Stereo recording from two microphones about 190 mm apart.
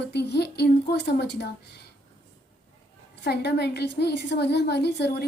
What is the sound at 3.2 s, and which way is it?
A woman's voice, 60° left (ahead or behind).